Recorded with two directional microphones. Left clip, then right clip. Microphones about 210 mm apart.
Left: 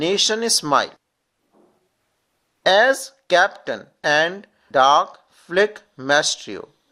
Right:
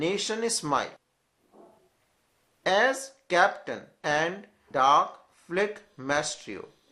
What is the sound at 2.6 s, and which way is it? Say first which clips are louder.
Speech: left 9 dB; 45° left (ahead or behind).